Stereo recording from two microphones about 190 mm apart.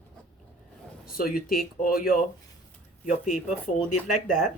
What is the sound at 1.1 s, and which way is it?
Speech, 50° left (ahead or behind).